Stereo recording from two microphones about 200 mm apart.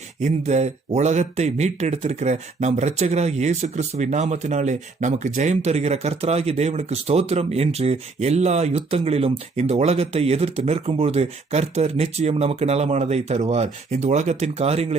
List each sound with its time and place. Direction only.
0.2 s speech: 35° right (ahead or behind)